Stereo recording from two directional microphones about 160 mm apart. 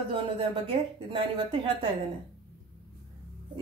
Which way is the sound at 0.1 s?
30° right (ahead or behind).